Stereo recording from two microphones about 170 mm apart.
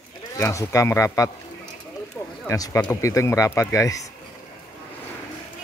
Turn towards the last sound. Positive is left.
turn(degrees=20)  # may be behind; listen again after turning